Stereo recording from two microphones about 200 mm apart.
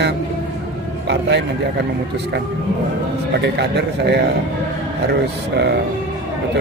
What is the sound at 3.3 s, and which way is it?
Speech, 60° right (ahead or behind).